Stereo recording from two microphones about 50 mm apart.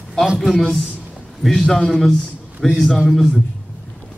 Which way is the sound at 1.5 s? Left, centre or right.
Centre.